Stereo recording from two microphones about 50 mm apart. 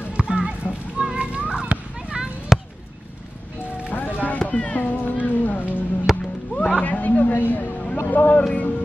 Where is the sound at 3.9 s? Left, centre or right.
Left.